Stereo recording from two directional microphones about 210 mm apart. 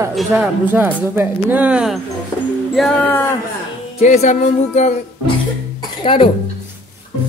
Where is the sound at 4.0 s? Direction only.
35° left (ahead or behind).